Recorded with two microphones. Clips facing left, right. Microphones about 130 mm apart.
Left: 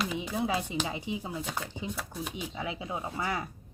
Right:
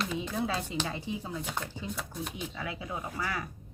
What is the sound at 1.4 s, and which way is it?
Speech, centre (ahead or behind).